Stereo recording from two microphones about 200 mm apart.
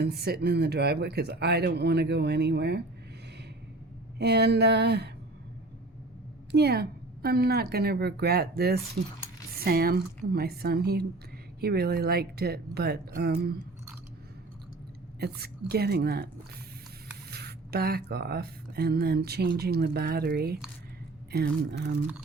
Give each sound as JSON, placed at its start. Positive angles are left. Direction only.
{"t": 0.0, "sound": "speech", "side_deg": -55}
{"t": 4.2, "sound": "speech", "side_deg": -55}
{"t": 6.5, "sound": "speech", "side_deg": -55}
{"t": 15.7, "sound": "speech", "side_deg": -50}
{"t": 17.3, "sound": "speech", "side_deg": -55}